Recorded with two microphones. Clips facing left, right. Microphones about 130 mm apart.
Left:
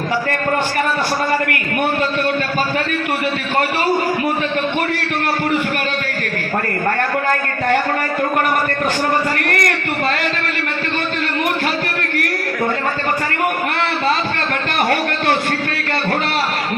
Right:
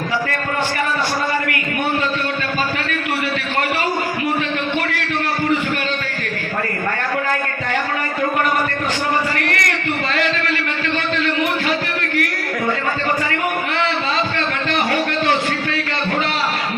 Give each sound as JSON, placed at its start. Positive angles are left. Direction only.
{"t": 9.4, "sound": "a man's voice", "side_deg": 50}